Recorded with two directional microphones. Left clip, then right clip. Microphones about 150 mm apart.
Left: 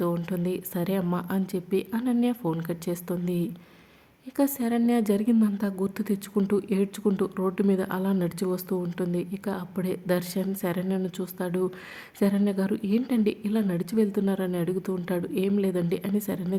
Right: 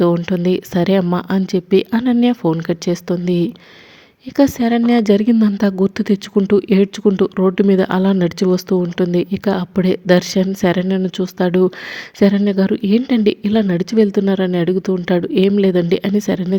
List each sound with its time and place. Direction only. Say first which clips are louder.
0.3 s speech: right 13 dB; 40° right (ahead or behind)